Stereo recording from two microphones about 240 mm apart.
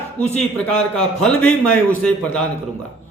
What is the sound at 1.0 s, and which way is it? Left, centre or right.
A man's voice, centre.